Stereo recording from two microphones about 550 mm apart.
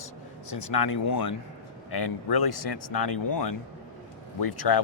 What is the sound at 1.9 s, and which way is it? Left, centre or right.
Speech, left.